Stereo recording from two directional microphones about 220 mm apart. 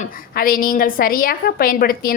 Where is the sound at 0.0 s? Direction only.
40° left (ahead or behind).